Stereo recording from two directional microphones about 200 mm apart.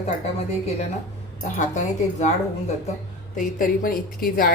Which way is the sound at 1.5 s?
35° left (ahead or behind).